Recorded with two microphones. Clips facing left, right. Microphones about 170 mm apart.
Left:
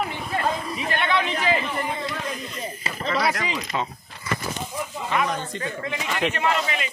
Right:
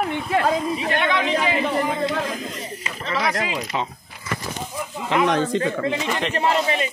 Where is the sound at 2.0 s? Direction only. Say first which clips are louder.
Right 6 dB; 80° right.